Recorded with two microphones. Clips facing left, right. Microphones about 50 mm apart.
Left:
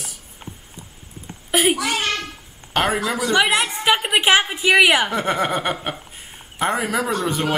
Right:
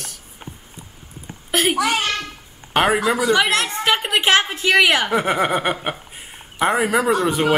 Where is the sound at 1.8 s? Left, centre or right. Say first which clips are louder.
Right 3 dB; centre.